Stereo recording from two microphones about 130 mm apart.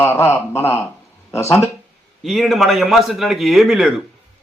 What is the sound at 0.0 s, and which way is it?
A man's voice, 20° left (ahead or behind).